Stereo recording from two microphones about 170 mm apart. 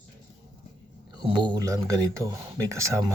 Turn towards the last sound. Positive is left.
turn(degrees=-20)  # may be behind; listen again after turning